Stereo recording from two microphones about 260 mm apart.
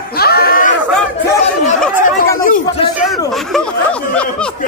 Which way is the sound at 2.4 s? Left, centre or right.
Left.